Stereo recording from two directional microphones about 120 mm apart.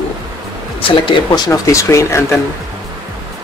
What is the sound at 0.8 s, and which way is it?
Speech, 45° left (ahead or behind).